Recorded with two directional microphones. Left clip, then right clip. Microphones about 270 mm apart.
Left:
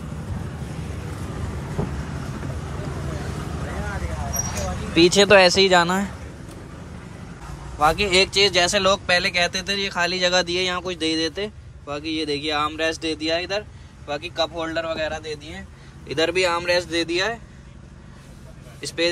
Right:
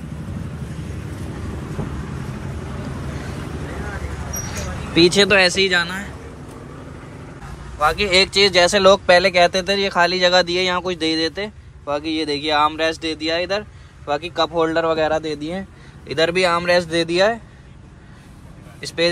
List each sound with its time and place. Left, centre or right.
1.8 s vehicle: left
4.5 s speech: centre
7.8 s speech: centre
16.1 s speech: centre
18.8 s speech: centre